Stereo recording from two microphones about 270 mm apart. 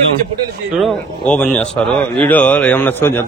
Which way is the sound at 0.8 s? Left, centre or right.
Centre.